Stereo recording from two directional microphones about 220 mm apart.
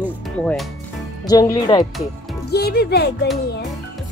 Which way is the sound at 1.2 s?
15° left (ahead or behind).